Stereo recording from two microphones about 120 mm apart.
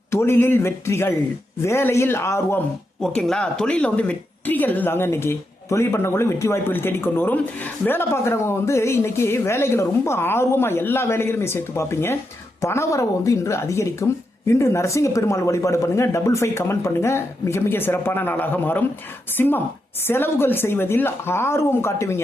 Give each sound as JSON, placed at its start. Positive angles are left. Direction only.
{"t": 0.1, "sound": "speech", "side_deg": 20}
{"t": 3.0, "sound": "speech", "side_deg": 5}